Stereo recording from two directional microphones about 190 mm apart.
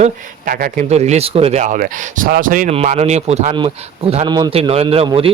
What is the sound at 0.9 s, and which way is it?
A man's voice, 35° right (ahead or behind).